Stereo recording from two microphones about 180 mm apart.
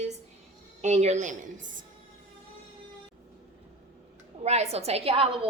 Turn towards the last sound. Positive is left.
turn(degrees=-30)  # may be behind; listen again after turning